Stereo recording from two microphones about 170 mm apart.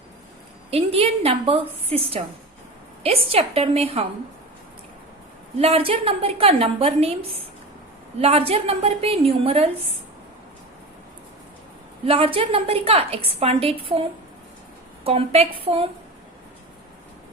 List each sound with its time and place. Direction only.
0.7 s a woman's voice: 35° right (ahead or behind)
5.5 s a woman's voice: 35° right (ahead or behind)
12.0 s a woman's voice: 35° right (ahead or behind)
15.0 s a woman's voice: 35° right (ahead or behind)